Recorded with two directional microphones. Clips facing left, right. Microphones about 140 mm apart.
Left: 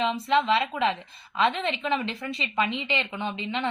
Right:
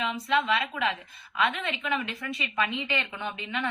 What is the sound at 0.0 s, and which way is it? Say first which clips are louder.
A woman's voice: left 4 dB; 25° left (ahead or behind).